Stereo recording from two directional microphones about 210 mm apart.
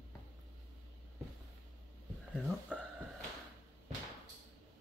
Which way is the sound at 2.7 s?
5° left (ahead or behind).